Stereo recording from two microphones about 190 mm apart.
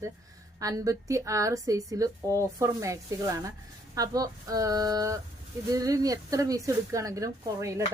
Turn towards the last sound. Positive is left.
turn(degrees=-15)  # may be behind; listen again after turning